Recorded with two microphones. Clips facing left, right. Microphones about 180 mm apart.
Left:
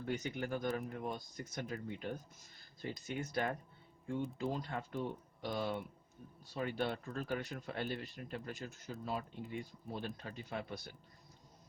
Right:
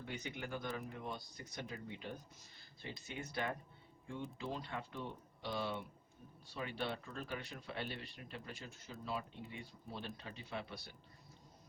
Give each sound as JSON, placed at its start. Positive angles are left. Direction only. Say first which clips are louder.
{"t": 0.0, "sound": "speech", "louder": "left 6 dB", "side_deg": 40}